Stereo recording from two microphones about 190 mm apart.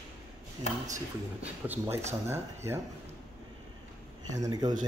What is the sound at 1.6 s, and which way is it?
Speech, 10° right (ahead or behind).